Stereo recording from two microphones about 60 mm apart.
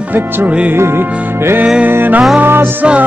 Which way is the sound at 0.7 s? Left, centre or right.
Right.